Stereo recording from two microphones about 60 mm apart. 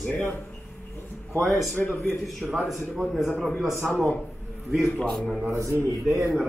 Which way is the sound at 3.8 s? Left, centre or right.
Left.